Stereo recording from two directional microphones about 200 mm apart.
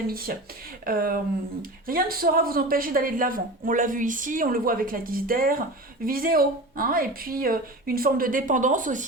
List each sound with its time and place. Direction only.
0.9 s a woman's voice: 45° right (ahead or behind)